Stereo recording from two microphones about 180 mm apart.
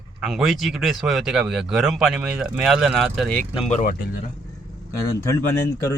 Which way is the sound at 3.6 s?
40° left (ahead or behind).